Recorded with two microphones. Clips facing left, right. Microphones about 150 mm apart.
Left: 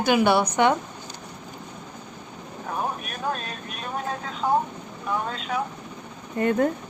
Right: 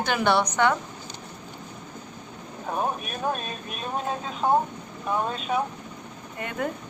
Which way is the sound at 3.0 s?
20° right (ahead or behind).